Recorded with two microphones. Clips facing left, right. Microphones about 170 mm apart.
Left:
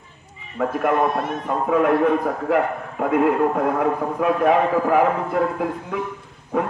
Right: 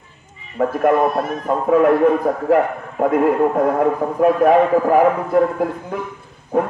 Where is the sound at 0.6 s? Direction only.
40° right (ahead or behind).